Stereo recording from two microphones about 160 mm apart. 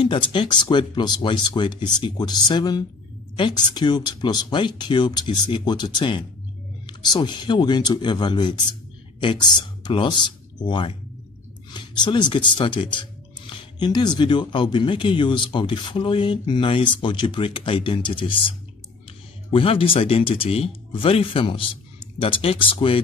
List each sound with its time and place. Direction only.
0.0 s speech: 30° left (ahead or behind)
19.5 s speech: 35° left (ahead or behind)